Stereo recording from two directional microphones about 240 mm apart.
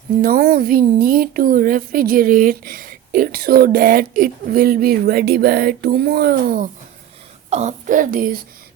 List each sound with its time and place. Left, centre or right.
0.2 s speech: right